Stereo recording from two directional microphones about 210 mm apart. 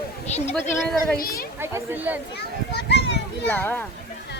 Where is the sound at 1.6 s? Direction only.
10° right (ahead or behind).